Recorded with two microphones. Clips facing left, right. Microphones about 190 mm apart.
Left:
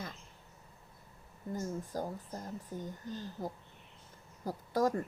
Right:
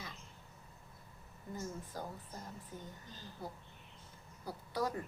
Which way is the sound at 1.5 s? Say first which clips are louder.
Left 6 dB; 45° left (ahead or behind).